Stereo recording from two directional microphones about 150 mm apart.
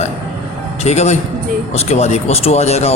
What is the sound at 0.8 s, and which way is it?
Speech, 50° left (ahead or behind).